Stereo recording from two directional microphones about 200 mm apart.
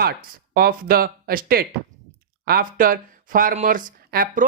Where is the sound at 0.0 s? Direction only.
50° right (ahead or behind).